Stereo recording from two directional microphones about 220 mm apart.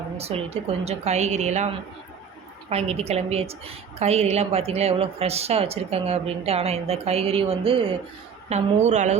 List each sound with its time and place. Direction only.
0.2 s speech: 25° right (ahead or behind)
2.6 s a woman's voice: 30° right (ahead or behind)